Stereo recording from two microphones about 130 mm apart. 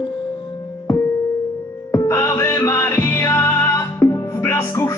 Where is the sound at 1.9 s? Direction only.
25° left (ahead or behind).